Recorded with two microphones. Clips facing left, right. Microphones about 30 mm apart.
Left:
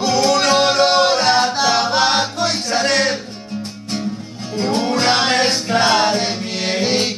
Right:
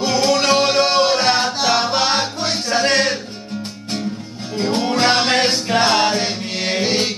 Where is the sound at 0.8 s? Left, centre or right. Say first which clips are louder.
Left 2 dB; centre.